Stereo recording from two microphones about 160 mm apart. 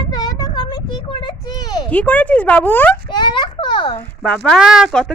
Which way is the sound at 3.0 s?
30° left (ahead or behind).